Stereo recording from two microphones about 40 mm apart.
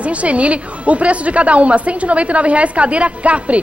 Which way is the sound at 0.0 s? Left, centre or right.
Right.